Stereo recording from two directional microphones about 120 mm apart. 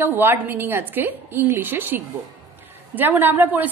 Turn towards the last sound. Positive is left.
turn(degrees=-15)  # may be behind; listen again after turning